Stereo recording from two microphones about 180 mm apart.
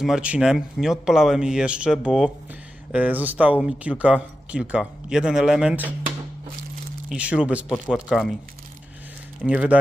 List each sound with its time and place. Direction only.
0.0 s speech: 5° right (ahead or behind)
7.1 s speech: 5° right (ahead or behind)
9.4 s speech: 5° right (ahead or behind)